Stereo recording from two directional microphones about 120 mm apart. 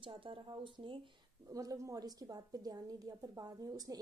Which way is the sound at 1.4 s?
30° right (ahead or behind).